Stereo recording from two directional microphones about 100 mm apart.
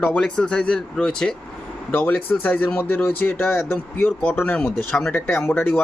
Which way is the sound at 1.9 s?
20° left (ahead or behind).